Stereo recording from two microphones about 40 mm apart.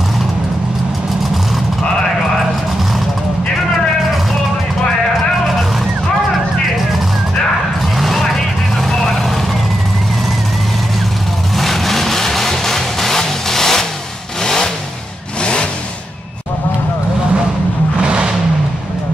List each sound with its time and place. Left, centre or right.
8.0 s vehicle: centre
11.5 s vehicle: centre
18.0 s vehicle: right